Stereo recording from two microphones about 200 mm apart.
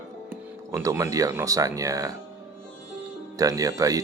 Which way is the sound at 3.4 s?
15° right (ahead or behind).